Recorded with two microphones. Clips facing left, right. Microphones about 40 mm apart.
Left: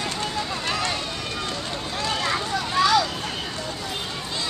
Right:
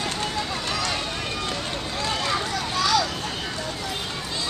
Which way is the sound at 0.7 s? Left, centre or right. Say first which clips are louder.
Left 3 dB; left.